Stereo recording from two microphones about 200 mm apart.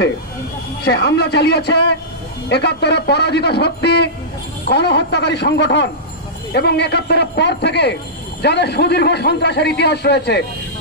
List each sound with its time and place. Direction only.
0.8 s speech: 55° left (ahead or behind)